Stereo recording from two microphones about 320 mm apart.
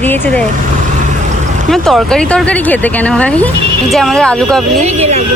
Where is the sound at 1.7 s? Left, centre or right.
Centre.